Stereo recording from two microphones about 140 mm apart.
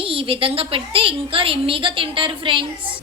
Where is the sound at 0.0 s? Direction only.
40° right (ahead or behind).